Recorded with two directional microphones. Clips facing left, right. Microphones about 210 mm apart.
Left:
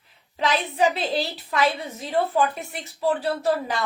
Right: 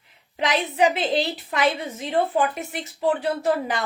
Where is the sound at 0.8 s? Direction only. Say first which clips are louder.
Right 2 dB; 20° right (ahead or behind).